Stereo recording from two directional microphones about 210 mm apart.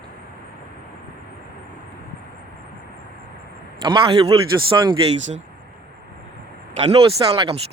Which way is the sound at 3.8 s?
25° right (ahead or behind).